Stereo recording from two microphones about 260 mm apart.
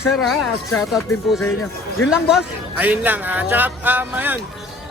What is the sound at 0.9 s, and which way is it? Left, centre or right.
A man's voice, centre.